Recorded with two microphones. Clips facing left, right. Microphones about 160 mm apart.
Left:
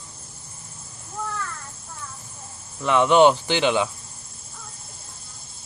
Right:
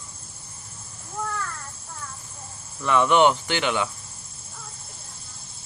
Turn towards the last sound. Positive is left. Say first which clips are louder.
# left 4 dB
turn(degrees=25)  # may be behind; listen again after turning